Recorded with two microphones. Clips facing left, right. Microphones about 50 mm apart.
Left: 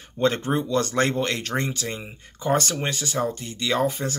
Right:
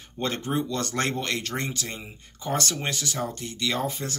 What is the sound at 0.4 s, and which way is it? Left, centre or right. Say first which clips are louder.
Speech: left 3 dB; left.